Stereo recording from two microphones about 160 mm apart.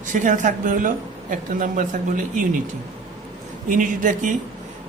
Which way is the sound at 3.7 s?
55° right (ahead or behind).